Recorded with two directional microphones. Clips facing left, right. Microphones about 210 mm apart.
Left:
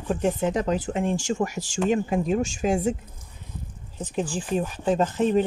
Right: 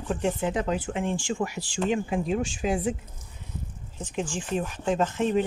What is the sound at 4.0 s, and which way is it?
Speech, 35° left (ahead or behind).